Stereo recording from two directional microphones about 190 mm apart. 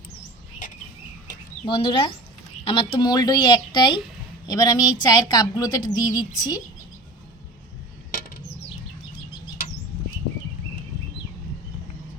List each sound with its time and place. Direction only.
1.6 s a woman's voice: 25° left (ahead or behind)